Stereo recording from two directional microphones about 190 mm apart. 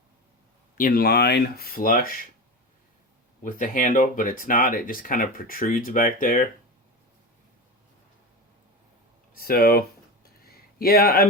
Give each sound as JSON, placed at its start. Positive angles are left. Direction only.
{"t": 0.8, "sound": "speech", "side_deg": 50}
{"t": 3.4, "sound": "speech", "side_deg": 45}
{"t": 9.3, "sound": "speech", "side_deg": 50}
{"t": 10.4, "sound": "a sound", "side_deg": 55}